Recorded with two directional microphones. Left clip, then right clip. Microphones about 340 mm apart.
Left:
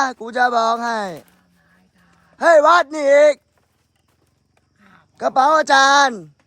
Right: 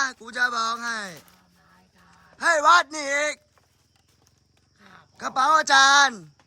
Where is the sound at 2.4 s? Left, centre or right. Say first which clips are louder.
Left 6 dB; centre.